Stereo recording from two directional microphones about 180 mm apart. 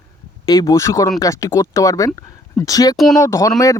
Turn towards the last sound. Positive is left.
turn(degrees=15)  # may be behind; listen again after turning